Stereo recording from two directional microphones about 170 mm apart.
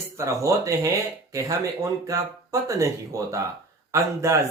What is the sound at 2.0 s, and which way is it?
Speech, 20° right (ahead or behind).